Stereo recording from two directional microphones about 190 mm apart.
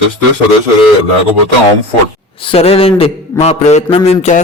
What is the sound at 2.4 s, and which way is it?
A man's voice, 30° left (ahead or behind).